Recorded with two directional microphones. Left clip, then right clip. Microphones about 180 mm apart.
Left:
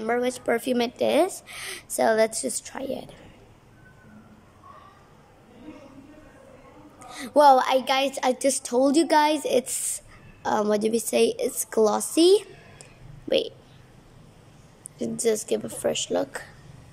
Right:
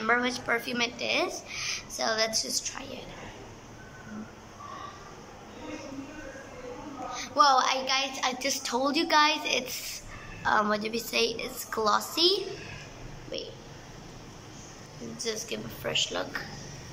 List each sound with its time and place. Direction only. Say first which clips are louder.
0.0 s a woman's voice: left 2 dB; 35° left (ahead or behind)
7.2 s a woman's voice: left 6 dB; 50° left (ahead or behind)
15.2 s a woman's voice: left 10 dB; 45° left (ahead or behind)